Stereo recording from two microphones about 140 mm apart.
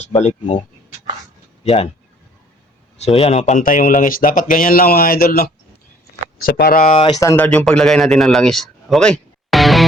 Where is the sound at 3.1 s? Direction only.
45° left (ahead or behind).